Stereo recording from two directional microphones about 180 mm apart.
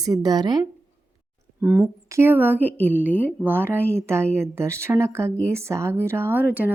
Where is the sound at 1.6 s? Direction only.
10° right (ahead or behind).